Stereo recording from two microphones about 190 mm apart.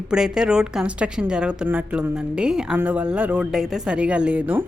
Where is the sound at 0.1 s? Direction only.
5° right (ahead or behind).